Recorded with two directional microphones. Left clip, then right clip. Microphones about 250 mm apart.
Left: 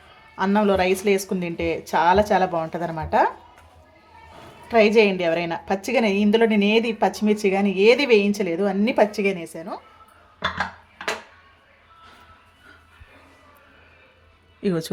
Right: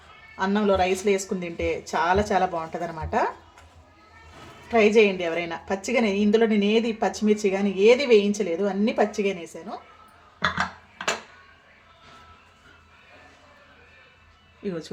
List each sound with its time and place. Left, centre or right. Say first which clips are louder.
0.3 s a woman's voice: left 2 dB; left
4.7 s a woman's voice: left 2 dB; left
14.6 s speech: left 7 dB; left